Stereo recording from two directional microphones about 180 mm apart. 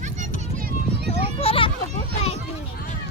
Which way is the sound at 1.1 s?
30° left (ahead or behind).